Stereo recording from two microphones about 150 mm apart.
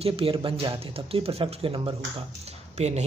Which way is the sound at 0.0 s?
35° right (ahead or behind).